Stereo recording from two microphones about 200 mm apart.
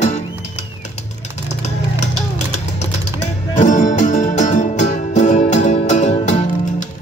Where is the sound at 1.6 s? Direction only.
35° left (ahead or behind).